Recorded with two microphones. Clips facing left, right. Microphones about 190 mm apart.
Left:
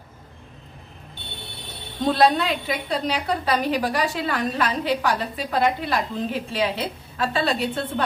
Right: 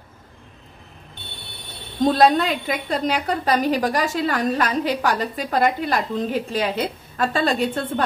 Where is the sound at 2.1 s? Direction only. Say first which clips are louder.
Right 1 dB; 45° right (ahead or behind).